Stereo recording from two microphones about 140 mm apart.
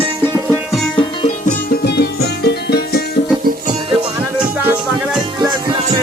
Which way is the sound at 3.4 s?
90° right.